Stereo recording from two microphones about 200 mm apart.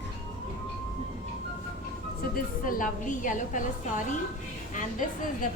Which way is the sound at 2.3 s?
45° left (ahead or behind).